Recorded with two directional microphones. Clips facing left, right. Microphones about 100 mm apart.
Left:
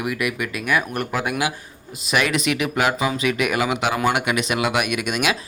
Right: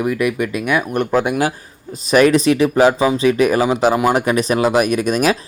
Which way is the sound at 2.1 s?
35° right (ahead or behind).